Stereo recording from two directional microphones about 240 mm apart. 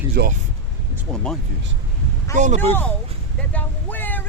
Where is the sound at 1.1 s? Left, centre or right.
Centre.